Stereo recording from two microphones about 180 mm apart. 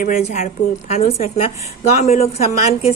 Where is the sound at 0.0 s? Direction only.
45° left (ahead or behind).